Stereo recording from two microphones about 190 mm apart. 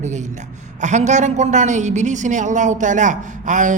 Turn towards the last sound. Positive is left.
turn(degrees=-40)  # may be behind; listen again after turning